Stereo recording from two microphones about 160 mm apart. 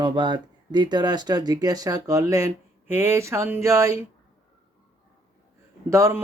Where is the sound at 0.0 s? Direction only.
30° right (ahead or behind).